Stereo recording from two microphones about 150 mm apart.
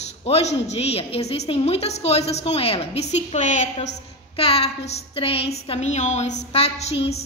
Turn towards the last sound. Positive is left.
turn(degrees=45)  # may be behind; listen again after turning